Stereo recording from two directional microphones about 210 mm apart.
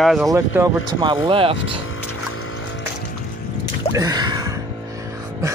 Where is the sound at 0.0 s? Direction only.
Centre (ahead or behind).